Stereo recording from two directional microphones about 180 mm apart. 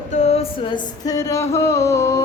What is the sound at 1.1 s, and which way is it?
Music, 20° left (ahead or behind).